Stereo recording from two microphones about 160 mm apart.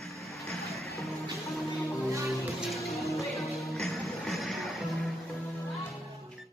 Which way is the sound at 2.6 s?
Centre (ahead or behind).